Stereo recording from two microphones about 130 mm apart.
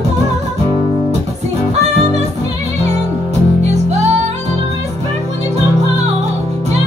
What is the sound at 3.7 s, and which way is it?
Music, 60° right (ahead or behind).